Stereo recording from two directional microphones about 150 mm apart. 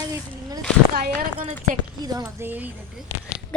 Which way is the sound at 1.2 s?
60° right (ahead or behind).